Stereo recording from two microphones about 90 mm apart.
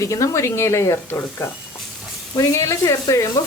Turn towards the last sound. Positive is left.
turn(degrees=40)  # may be behind; listen again after turning